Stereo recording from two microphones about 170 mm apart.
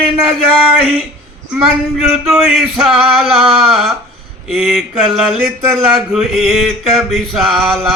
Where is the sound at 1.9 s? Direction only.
Centre (ahead or behind).